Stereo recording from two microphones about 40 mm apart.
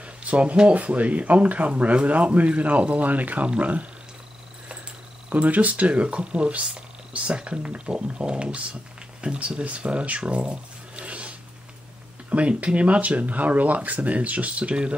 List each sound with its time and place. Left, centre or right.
0.0 s a sound: right
0.6 s speech: right
5.3 s speech: right